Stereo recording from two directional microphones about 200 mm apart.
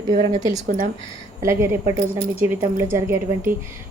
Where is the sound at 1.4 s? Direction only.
15° right (ahead or behind).